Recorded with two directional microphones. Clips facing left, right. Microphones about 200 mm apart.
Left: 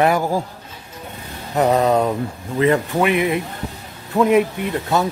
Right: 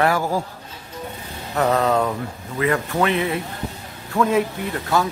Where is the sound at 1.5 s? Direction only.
15° left (ahead or behind).